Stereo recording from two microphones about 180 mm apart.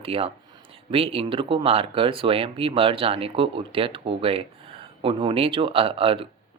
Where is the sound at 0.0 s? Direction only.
30° right (ahead or behind).